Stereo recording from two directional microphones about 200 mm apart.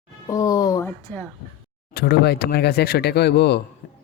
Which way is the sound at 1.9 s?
50° left (ahead or behind).